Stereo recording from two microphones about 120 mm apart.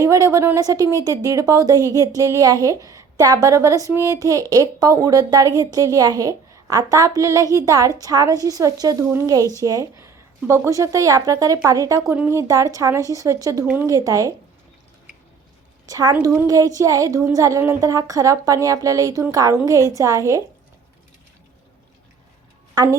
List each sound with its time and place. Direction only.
0.0 s speech: 25° right (ahead or behind)
15.9 s speech: 30° right (ahead or behind)
22.7 s a woman's voice: 30° right (ahead or behind)